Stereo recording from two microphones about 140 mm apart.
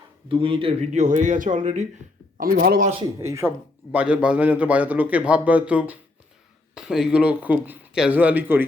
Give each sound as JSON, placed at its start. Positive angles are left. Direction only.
{"t": 0.3, "sound": "speech", "side_deg": -40}
{"t": 0.9, "sound": "speech", "side_deg": -60}
{"t": 2.4, "sound": "speech", "side_deg": -90}
{"t": 3.2, "sound": "speech", "side_deg": -20}
{"t": 3.9, "sound": "a man's voice", "side_deg": -10}